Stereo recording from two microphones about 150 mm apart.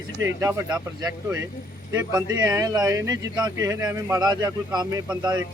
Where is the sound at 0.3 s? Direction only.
25° right (ahead or behind).